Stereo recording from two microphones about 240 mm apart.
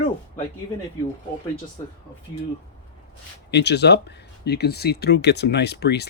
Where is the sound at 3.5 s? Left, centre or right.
Left.